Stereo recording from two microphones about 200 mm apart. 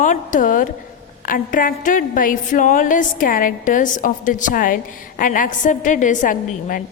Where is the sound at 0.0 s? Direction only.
40° left (ahead or behind).